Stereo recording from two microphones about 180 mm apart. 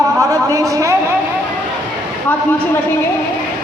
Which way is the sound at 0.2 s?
20° right (ahead or behind).